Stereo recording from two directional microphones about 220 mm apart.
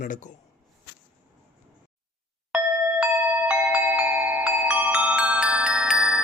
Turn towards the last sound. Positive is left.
turn(degrees=-5)  # may be behind; listen again after turning